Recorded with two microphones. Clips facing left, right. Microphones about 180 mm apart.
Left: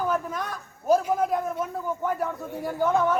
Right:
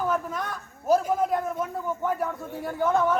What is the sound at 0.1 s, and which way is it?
Speech, centre (ahead or behind).